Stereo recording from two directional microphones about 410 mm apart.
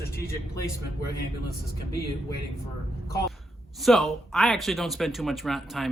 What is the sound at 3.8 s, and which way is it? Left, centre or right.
Speech, centre.